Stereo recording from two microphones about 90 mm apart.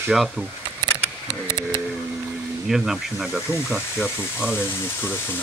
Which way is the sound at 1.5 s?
30° left (ahead or behind).